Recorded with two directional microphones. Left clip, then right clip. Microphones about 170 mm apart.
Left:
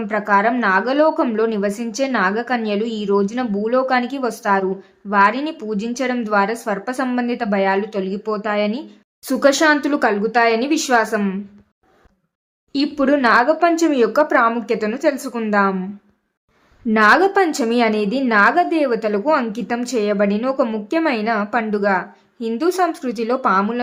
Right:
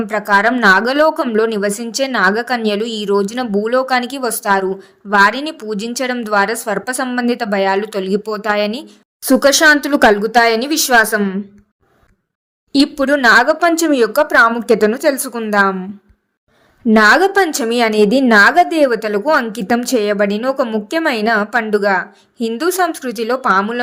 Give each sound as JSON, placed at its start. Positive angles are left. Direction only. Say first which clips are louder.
{"t": 0.1, "sound": "speech", "louder": "right 3 dB", "side_deg": -40}
{"t": 12.7, "sound": "speech", "louder": "right 4 dB", "side_deg": -35}
{"t": 16.9, "sound": "speech", "louder": "right 3 dB", "side_deg": -35}